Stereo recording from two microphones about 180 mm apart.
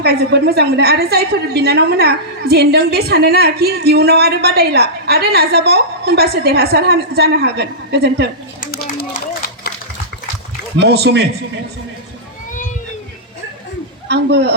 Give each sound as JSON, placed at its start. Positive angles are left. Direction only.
{"t": 0.0, "sound": "a woman's voice", "side_deg": -65}
{"t": 8.6, "sound": "a sound", "side_deg": 55}
{"t": 10.8, "sound": "a woman's voice", "side_deg": -65}
{"t": 14.1, "sound": "a man's voice", "side_deg": -65}